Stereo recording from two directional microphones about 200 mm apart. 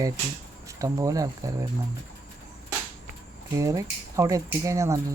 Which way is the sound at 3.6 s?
15° right (ahead or behind).